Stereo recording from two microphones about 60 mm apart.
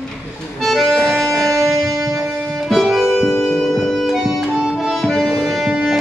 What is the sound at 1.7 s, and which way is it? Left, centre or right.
Music, right.